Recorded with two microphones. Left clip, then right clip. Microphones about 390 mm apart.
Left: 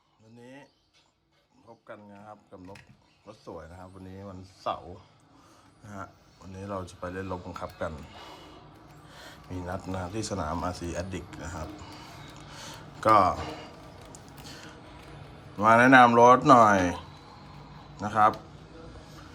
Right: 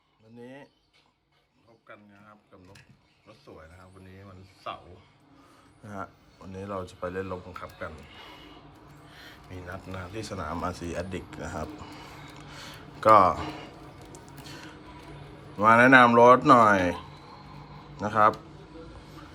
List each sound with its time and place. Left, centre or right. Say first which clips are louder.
0.3 s a sound: right 3 dB; centre
3.2 s speech: left 6 dB; centre
5.8 s speech: right 3 dB; centre
9.6 s speech: left 4 dB; centre
14.1 s a sound: right 1 dB; centre
15.5 s speech: right 1 dB; centre